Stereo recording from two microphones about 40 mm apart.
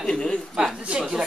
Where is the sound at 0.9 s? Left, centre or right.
Right.